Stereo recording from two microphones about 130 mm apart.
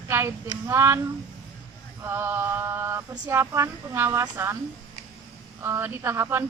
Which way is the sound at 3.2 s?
20° right (ahead or behind).